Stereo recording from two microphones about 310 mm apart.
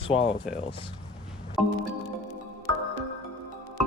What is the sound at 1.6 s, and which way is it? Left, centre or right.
Speech, centre.